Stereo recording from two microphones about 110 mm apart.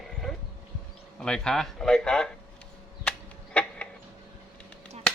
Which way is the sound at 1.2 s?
5° left (ahead or behind).